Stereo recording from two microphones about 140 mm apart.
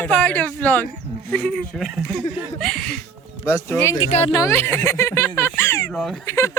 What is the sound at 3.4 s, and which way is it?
Speech, 15° left (ahead or behind).